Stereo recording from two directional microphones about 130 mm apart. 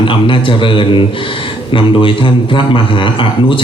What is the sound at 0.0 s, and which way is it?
A man's voice, 40° left (ahead or behind).